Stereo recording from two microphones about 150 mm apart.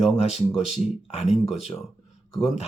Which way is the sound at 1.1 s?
45° left (ahead or behind).